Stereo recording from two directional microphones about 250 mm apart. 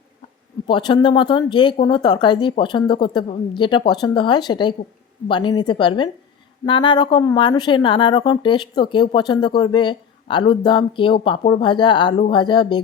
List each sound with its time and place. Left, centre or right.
0.7 s speech: centre